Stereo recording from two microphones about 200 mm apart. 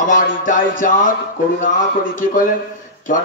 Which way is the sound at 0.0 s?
40° left (ahead or behind).